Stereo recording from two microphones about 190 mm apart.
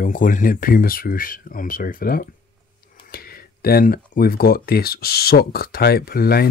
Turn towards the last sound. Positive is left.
turn(degrees=55)  # may be behind; listen again after turning